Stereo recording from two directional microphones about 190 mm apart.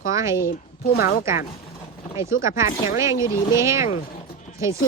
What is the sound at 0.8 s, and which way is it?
Speech, 50° left (ahead or behind).